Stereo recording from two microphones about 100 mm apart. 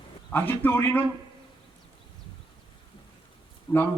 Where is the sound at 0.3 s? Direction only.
20° left (ahead or behind).